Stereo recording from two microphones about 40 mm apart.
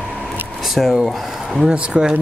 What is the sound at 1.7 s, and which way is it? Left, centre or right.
Speech, right.